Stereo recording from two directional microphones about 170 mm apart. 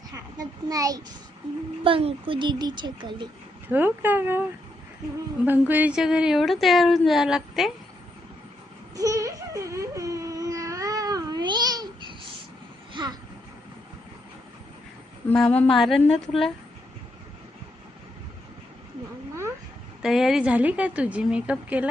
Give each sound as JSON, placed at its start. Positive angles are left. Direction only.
{"t": 0.1, "sound": "a child's voice", "side_deg": -20}
{"t": 1.8, "sound": "a child's voice", "side_deg": -35}
{"t": 3.7, "sound": "a woman's voice", "side_deg": -10}
{"t": 5.5, "sound": "a woman's voice", "side_deg": -10}
{"t": 9.0, "sound": "a sound", "side_deg": -20}
{"t": 12.9, "sound": "vehicle", "side_deg": -25}
{"t": 15.3, "sound": "a woman's voice", "side_deg": 5}
{"t": 20.0, "sound": "a woman's voice", "side_deg": 0}